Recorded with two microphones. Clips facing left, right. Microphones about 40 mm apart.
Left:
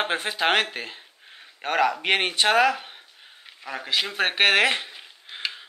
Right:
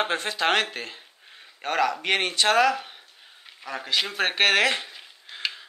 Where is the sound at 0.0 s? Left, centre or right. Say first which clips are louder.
Left 1 dB; centre.